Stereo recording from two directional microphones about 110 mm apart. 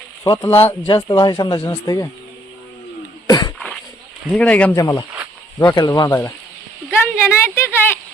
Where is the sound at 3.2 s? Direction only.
40° left (ahead or behind).